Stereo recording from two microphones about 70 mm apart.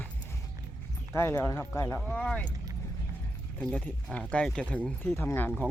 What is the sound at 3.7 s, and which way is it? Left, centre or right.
Speech, centre.